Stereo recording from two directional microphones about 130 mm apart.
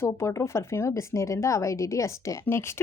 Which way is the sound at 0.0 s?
20° left (ahead or behind).